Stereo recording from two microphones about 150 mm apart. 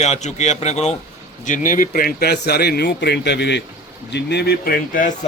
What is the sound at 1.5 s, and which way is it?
A man's voice, 60° left (ahead or behind).